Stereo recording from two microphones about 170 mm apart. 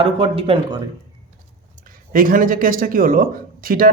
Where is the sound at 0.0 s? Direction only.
35° right (ahead or behind).